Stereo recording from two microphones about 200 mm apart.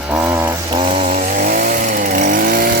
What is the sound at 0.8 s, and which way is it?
Chainsaw, 30° right (ahead or behind).